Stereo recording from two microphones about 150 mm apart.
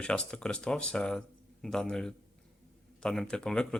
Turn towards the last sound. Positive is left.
turn(degrees=5)  # may be behind; listen again after turning